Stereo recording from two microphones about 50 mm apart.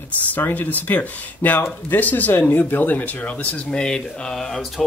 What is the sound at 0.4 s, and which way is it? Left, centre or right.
Speech, left.